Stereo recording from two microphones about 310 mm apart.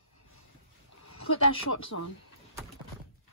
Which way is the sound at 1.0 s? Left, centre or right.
Left.